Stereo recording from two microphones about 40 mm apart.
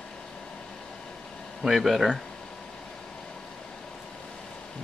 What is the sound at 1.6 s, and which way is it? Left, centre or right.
Speech, centre.